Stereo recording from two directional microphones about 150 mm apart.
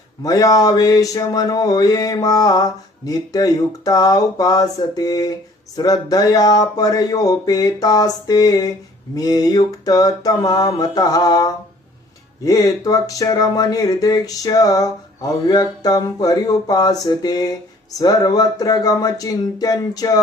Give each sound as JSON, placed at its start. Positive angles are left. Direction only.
{"t": 0.2, "sound": "speech", "side_deg": 25}